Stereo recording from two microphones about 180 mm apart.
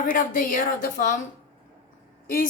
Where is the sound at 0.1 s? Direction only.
50° left (ahead or behind).